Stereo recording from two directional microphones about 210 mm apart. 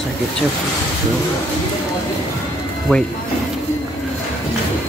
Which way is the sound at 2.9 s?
5° left (ahead or behind).